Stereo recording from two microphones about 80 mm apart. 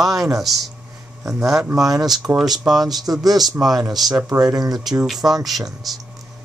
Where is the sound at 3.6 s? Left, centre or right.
Right.